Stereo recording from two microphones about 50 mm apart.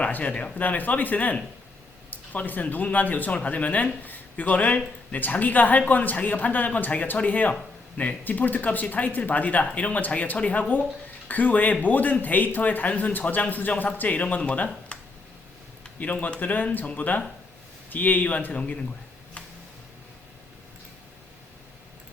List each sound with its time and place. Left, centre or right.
0.0 s speech: left
16.2 s speech: left